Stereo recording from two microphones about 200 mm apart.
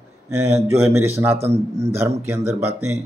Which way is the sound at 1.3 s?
30° right (ahead or behind).